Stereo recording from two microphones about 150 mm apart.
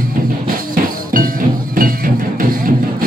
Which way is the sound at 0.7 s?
70° right (ahead or behind).